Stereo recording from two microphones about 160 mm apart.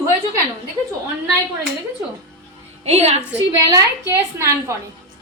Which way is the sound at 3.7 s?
20° right (ahead or behind).